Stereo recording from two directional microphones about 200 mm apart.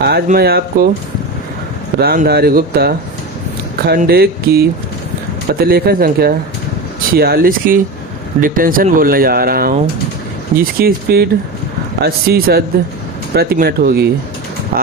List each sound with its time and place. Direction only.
0.0 s speech: 55° right (ahead or behind)
2.0 s speech: 50° right (ahead or behind)